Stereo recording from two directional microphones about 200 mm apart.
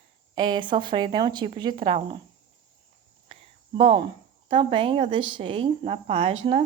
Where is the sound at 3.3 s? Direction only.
25° right (ahead or behind).